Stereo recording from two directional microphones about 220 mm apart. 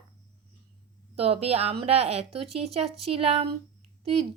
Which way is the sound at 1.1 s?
25° right (ahead or behind).